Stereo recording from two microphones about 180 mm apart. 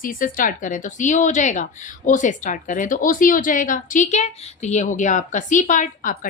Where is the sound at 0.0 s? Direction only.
50° left (ahead or behind).